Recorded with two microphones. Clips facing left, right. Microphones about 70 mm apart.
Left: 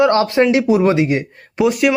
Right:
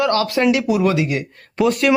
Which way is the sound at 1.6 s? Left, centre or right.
Centre.